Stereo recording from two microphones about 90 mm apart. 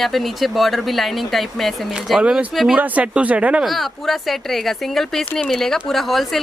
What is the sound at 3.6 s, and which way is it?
Speech, centre (ahead or behind).